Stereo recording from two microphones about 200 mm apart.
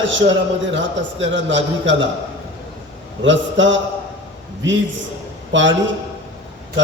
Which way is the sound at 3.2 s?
65° right (ahead or behind).